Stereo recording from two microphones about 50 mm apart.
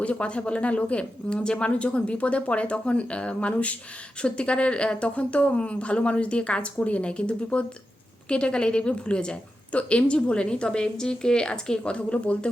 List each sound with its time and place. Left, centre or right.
0.0 s a woman's voice: left